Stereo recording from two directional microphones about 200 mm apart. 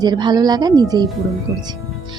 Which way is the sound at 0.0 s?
20° right (ahead or behind).